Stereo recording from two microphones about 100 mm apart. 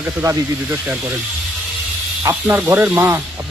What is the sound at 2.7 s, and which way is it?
Speech, 20° right (ahead or behind).